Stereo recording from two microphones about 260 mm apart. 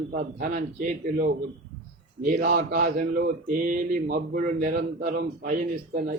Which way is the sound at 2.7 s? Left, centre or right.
Right.